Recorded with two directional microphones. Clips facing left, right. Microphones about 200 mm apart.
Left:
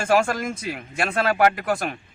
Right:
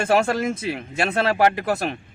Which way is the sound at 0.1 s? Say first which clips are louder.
Even; 25° right (ahead or behind).